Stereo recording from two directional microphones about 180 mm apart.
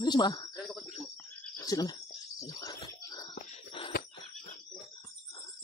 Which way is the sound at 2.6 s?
20° left (ahead or behind).